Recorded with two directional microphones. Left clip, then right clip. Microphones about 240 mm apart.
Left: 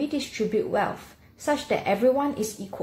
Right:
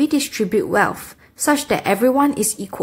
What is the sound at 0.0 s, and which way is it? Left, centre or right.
A woman's voice, right.